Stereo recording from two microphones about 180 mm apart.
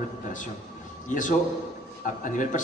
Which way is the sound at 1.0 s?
45° left (ahead or behind).